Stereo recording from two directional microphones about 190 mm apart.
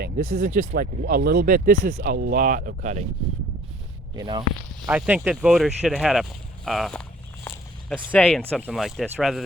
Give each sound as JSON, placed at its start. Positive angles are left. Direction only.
{"t": 0.0, "sound": "speech", "side_deg": -50}
{"t": 4.1, "sound": "speech", "side_deg": -20}
{"t": 4.9, "sound": "speech", "side_deg": -5}